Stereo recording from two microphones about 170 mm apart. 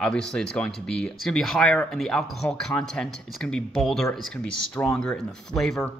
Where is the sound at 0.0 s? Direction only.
5° left (ahead or behind).